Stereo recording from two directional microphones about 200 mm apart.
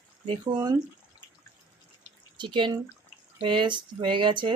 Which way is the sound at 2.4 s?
25° right (ahead or behind).